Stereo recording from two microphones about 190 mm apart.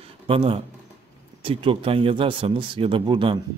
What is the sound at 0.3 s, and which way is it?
A man's voice, 30° right (ahead or behind).